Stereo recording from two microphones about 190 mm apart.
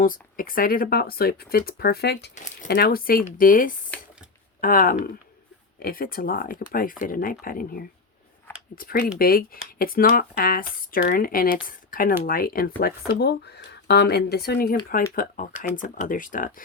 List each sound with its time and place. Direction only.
0.0 s speech: 50° left (ahead or behind)
2.3 s speech: 40° left (ahead or behind)
2.6 s speech: 55° left (ahead or behind)